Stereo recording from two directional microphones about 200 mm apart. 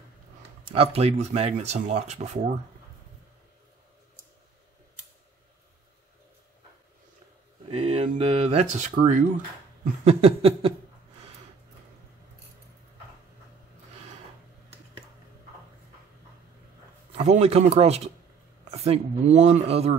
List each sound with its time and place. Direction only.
0.7 s speech: 30° right (ahead or behind)
7.6 s speech: 30° right (ahead or behind)
10.0 s a sound: 30° right (ahead or behind)
17.2 s speech: 30° right (ahead or behind)